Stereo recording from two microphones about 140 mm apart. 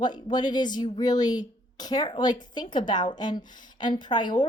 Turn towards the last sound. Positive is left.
turn(degrees=30)  # may be behind; listen again after turning